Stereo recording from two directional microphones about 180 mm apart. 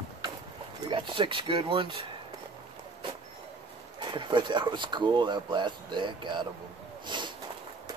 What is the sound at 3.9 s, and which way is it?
Speech, 25° right (ahead or behind).